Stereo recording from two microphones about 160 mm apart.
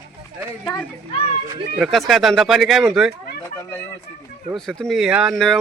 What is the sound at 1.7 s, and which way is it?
Speech, centre (ahead or behind).